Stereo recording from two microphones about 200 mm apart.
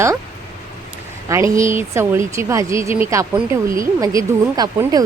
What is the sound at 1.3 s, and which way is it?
Speech, 15° right (ahead or behind).